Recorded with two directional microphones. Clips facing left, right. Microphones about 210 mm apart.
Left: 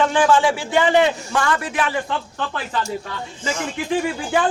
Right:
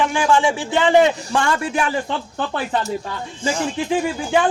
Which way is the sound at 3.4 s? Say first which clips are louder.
Right 4 dB; 30° right (ahead or behind).